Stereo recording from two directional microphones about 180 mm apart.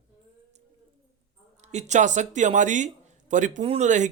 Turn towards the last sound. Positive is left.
turn(degrees=-40)  # may be behind; listen again after turning